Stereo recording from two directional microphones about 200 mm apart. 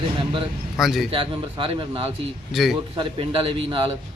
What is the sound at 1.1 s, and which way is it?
Speech, 25° right (ahead or behind).